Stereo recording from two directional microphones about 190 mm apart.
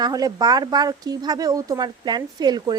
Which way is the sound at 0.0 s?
20° right (ahead or behind).